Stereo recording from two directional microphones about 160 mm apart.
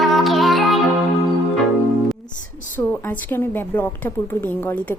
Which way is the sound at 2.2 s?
55° left (ahead or behind).